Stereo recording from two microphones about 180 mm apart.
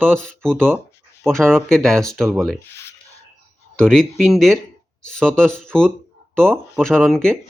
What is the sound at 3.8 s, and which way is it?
Speech, 5° left (ahead or behind).